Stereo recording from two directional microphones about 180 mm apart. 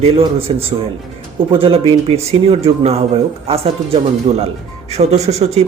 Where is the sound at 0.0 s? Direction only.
35° right (ahead or behind).